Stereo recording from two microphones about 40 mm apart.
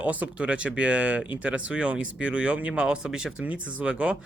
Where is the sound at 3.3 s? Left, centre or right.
Right.